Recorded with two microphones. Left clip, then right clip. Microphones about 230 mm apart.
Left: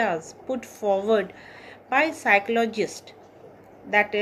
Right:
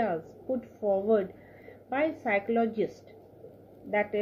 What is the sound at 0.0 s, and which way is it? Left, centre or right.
Speech, left.